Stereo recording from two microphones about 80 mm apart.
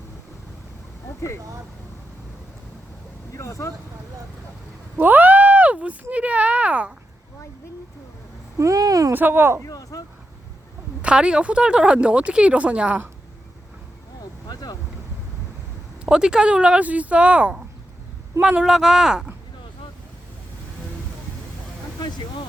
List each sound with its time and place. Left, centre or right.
1.0 s a sound: left
3.3 s speech: left
4.9 s speech: right
8.5 s speech: right
9.1 s speech: right
9.6 s a sound: left
11.0 s speech: centre
14.4 s boat: left
16.0 s speech: centre
18.6 s speech: centre
21.9 s a sound: left